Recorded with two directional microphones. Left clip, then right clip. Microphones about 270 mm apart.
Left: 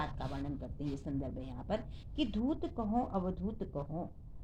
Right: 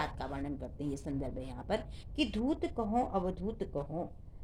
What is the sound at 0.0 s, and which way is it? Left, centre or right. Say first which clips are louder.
A woman's voice: right 3 dB; right.